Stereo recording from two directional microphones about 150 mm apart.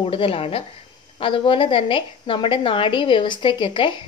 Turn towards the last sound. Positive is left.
turn(degrees=35)  # may be behind; listen again after turning